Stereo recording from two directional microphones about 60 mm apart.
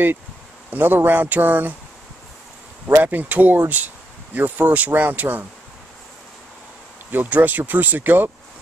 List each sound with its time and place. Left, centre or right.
0.7 s speech: right
2.9 s speech: right
7.1 s speech: right